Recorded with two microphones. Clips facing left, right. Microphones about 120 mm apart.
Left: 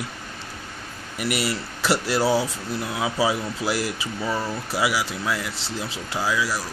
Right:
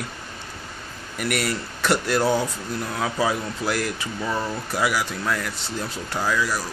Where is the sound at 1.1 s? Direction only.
5° left (ahead or behind).